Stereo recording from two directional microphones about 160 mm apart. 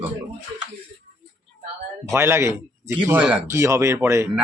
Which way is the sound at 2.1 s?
15° right (ahead or behind).